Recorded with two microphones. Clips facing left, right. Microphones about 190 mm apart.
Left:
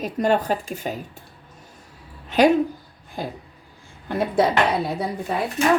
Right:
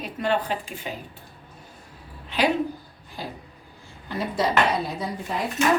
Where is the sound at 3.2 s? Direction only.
50° left (ahead or behind).